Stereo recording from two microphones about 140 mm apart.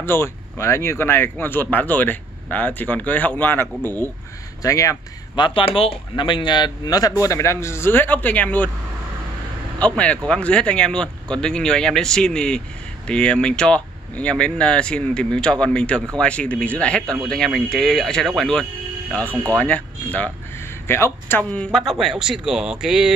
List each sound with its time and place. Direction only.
0.0 s speech: 15° left (ahead or behind)
9.8 s speech: 10° left (ahead or behind)
21.7 s speech: centre (ahead or behind)